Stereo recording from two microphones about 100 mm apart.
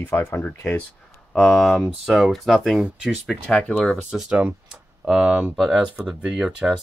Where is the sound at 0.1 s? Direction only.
30° left (ahead or behind).